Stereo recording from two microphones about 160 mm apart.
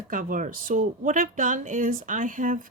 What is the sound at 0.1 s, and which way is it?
Speech, 60° right (ahead or behind).